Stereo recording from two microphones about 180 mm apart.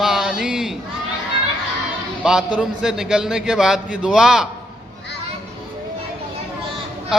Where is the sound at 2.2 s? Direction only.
5° right (ahead or behind).